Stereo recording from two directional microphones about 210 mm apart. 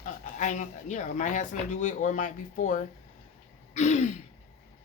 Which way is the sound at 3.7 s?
35° left (ahead or behind).